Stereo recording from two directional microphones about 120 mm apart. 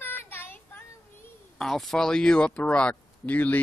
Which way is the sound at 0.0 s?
20° left (ahead or behind).